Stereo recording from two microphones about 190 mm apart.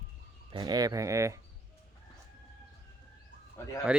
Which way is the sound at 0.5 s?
20° right (ahead or behind).